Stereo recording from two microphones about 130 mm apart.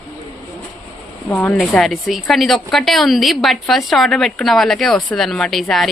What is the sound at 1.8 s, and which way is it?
A woman's voice, centre (ahead or behind).